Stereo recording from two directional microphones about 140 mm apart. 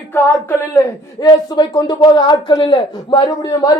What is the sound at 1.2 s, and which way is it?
Speech, 30° left (ahead or behind).